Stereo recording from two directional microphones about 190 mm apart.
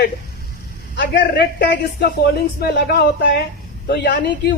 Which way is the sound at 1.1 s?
60° left (ahead or behind).